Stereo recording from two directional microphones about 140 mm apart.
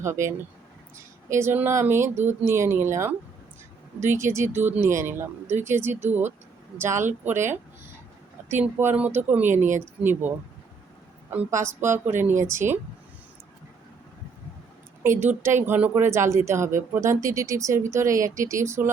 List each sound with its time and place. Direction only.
0.0 s speech: 20° right (ahead or behind)
15.0 s speech: 20° right (ahead or behind)